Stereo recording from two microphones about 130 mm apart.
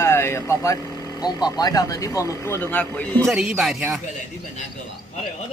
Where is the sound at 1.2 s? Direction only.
30° left (ahead or behind); by 3.1 s 10° left (ahead or behind).